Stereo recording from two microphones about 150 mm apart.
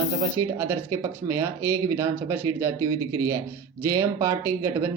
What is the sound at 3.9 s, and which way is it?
Speech, 20° right (ahead or behind).